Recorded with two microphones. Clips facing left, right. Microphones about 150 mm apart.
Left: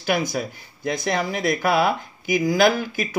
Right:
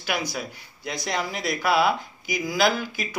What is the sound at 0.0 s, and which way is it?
Speech, 45° left (ahead or behind).